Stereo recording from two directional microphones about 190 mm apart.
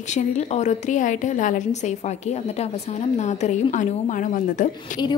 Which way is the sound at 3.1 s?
40° left (ahead or behind).